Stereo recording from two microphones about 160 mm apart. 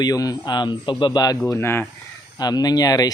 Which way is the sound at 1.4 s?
15° left (ahead or behind).